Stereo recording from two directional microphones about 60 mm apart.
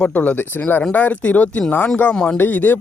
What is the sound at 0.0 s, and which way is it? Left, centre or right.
Speech, left.